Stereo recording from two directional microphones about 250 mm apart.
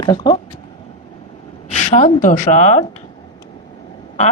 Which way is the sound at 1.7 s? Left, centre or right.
Left.